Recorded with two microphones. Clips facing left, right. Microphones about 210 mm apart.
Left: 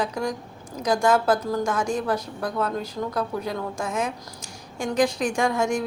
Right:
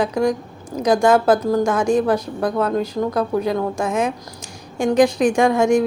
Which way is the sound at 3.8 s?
75° right (ahead or behind).